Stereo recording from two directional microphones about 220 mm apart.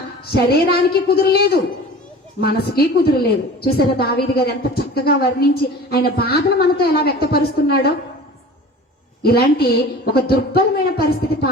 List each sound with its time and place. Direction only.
0.3 s a woman's voice: 45° left (ahead or behind)
9.2 s a woman's voice: 45° left (ahead or behind)